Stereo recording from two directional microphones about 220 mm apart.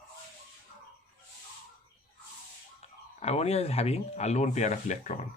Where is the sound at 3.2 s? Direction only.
30° left (ahead or behind).